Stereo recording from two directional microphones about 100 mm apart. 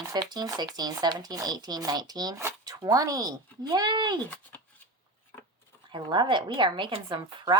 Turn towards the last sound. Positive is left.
turn(degrees=-45)  # may be behind; listen again after turning